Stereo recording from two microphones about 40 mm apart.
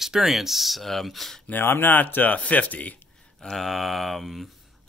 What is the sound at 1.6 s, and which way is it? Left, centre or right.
Speech, left.